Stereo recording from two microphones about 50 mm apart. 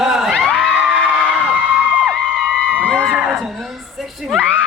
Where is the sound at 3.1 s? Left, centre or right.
Centre.